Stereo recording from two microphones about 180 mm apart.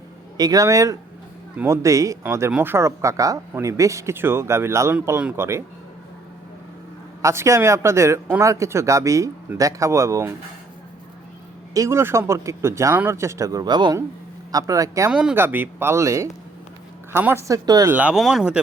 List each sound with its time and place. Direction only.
0.3 s speech: 20° right (ahead or behind)
7.2 s speech: 15° right (ahead or behind)
11.7 s speech: 15° right (ahead or behind)
15.1 s speech: 5° right (ahead or behind)
17.9 s speech: 5° right (ahead or behind)